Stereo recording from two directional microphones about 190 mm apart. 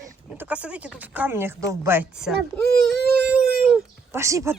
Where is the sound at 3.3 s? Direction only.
5° right (ahead or behind).